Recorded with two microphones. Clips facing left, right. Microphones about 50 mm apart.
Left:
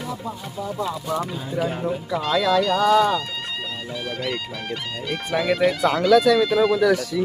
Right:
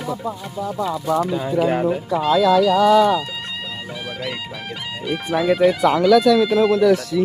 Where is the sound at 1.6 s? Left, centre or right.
Right.